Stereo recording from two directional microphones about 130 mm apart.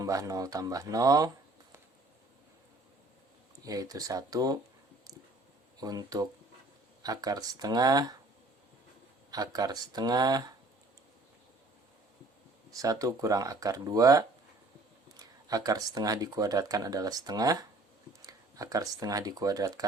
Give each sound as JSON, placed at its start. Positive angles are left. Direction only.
{"t": 0.0, "sound": "speech", "side_deg": -25}
{"t": 3.6, "sound": "speech", "side_deg": -30}
{"t": 5.8, "sound": "speech", "side_deg": -30}
{"t": 9.3, "sound": "speech", "side_deg": -30}
{"t": 12.7, "sound": "speech", "side_deg": -25}